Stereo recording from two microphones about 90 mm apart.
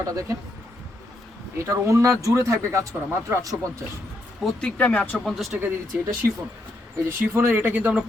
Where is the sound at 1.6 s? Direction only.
35° right (ahead or behind).